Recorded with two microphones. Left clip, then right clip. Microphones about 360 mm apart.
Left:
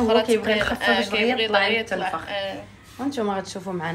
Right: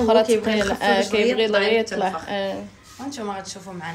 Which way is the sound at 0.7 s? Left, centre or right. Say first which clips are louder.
Right 2 dB; right.